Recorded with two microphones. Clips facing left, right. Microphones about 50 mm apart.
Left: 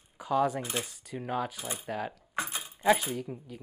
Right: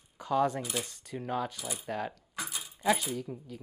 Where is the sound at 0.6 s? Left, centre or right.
Left.